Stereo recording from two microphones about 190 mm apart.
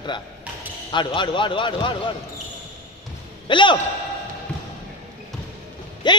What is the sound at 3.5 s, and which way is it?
Speech, 25° left (ahead or behind).